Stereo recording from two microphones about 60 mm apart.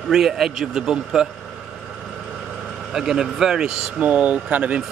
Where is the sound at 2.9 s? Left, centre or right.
Centre.